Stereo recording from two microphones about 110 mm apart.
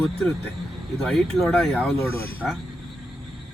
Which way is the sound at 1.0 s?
5° left (ahead or behind).